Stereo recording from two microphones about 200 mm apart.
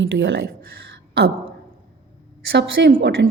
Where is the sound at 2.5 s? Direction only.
55° right (ahead or behind).